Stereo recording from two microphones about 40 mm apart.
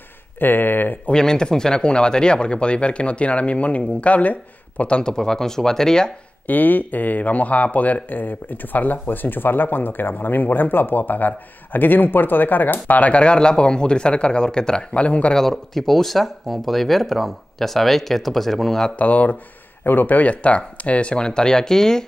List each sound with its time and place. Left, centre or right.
0.4 s speech: left
1.1 s speech: centre; by 4.8 s left
4.8 s speech: left
5.1 s speech: centre
6.4 s speech: left
13.0 s speech: left
15.5 s speech: centre
18.9 s speech: left
19.8 s speech: left; by 22.0 s centre